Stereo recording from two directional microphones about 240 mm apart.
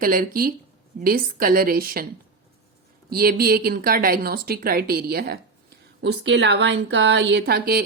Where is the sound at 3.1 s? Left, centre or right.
Right.